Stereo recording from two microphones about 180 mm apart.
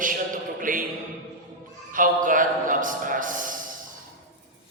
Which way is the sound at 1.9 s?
50° right (ahead or behind).